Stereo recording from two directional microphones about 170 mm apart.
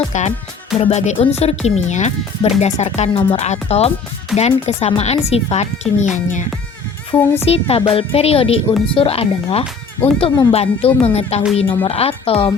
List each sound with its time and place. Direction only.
0.1 s a child's voice: 45° left (ahead or behind)